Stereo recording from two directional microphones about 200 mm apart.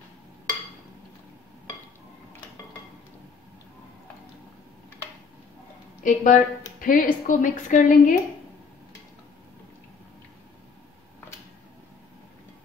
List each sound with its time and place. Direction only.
6.0 s a woman's voice: 40° left (ahead or behind)